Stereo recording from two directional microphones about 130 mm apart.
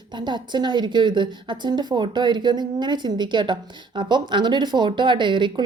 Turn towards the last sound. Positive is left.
turn(degrees=-40)  # may be behind; listen again after turning